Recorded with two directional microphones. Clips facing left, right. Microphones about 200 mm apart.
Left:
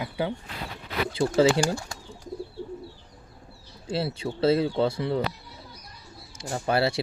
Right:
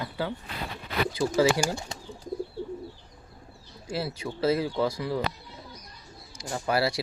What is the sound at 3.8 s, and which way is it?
Speech, 30° left (ahead or behind).